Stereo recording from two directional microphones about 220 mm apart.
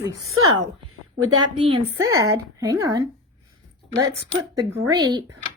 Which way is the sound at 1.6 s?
25° right (ahead or behind).